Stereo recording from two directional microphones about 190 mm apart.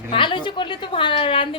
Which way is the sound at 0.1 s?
25° left (ahead or behind).